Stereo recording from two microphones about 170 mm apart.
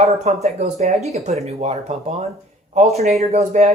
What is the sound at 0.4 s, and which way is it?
Speech, 40° right (ahead or behind).